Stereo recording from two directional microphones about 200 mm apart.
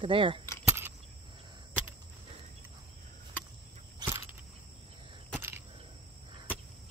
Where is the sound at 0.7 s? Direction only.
10° right (ahead or behind).